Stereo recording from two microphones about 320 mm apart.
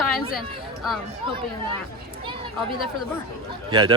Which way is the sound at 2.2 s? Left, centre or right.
Centre.